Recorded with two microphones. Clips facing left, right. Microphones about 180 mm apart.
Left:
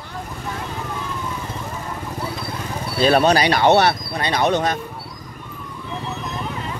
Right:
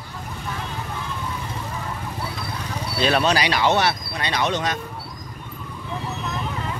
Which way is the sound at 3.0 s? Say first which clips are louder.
Left 5 dB; 45° left (ahead or behind).